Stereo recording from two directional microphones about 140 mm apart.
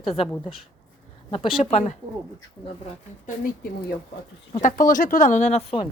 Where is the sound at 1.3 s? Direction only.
40° left (ahead or behind).